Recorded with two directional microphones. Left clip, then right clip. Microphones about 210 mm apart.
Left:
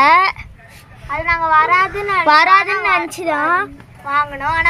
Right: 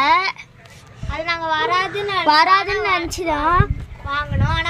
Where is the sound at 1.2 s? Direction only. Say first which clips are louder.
Left 7 dB; 5° left (ahead or behind).